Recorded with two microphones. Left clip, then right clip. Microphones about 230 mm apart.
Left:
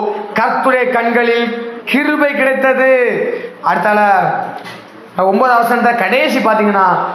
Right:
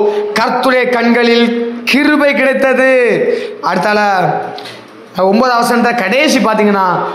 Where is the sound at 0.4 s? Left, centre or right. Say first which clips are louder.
Left 1 dB; right.